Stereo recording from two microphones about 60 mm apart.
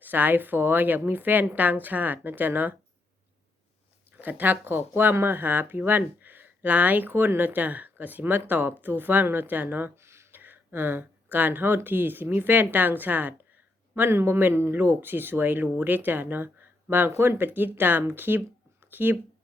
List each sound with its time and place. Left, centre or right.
0.0 s speech: right
4.2 s speech: right
9.9 s a sound: right
10.4 s speech: right